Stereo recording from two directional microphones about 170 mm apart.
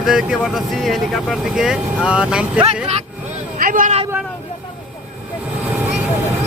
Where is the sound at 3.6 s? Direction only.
55° right (ahead or behind).